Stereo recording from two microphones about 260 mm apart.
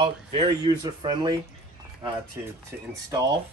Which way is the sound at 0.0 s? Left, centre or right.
Right.